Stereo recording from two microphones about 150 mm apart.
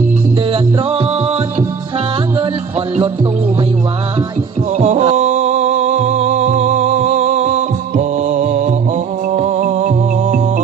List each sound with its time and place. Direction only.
0.5 s music: 35° right (ahead or behind)
4.9 s music: 45° right (ahead or behind)